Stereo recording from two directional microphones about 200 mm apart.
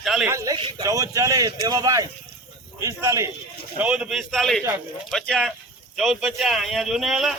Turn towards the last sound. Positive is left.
turn(degrees=0)  # may be behind; listen again after turning